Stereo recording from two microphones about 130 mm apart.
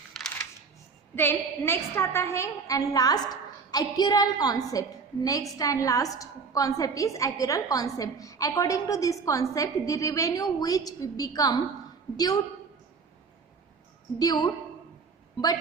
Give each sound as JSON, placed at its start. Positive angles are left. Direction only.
{"t": 1.1, "sound": "a woman's voice", "side_deg": 15}
{"t": 14.2, "sound": "a woman's voice", "side_deg": 30}